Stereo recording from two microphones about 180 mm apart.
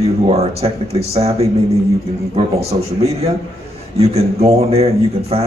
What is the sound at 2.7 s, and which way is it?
Speech, 35° right (ahead or behind).